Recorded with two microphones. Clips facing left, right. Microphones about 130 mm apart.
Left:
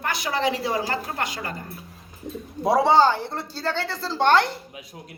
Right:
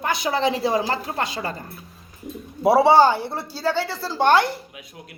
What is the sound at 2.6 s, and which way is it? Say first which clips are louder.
A woman's voice: right 3 dB; 5° right (ahead or behind).